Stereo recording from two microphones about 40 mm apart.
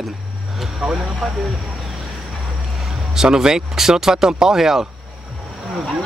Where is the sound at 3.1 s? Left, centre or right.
Centre.